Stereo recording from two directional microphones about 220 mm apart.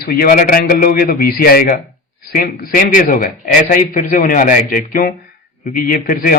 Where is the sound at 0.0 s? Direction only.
45° left (ahead or behind).